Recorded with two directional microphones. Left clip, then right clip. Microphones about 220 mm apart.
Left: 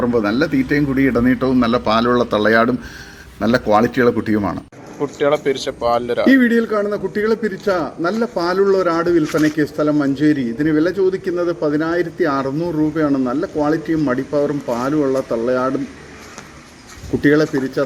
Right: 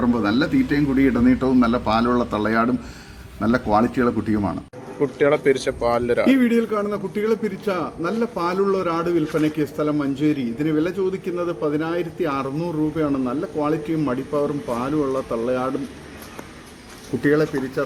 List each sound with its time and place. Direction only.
0.0 s a man's voice: 5° left (ahead or behind)
4.9 s speech: 10° right (ahead or behind)
6.4 s a man's voice: centre (ahead or behind)
17.2 s a man's voice: 10° left (ahead or behind)